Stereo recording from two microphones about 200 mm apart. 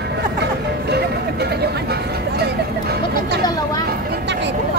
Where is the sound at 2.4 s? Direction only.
55° right (ahead or behind).